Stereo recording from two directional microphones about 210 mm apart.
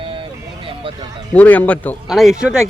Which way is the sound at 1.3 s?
5° left (ahead or behind).